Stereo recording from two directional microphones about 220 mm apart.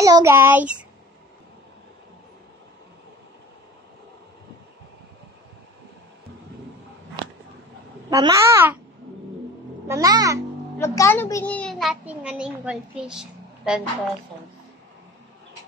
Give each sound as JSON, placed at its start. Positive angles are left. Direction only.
{"t": 0.0, "sound": "child singing", "side_deg": -15}
{"t": 8.1, "sound": "a child's voice", "side_deg": -15}
{"t": 9.8, "sound": "a child's voice", "side_deg": -15}
{"t": 10.8, "sound": "a child's voice", "side_deg": 10}